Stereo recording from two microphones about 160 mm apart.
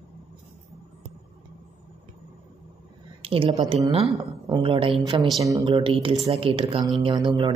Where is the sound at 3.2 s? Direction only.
35° right (ahead or behind).